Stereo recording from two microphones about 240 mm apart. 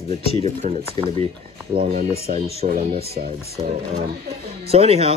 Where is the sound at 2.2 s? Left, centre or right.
Right.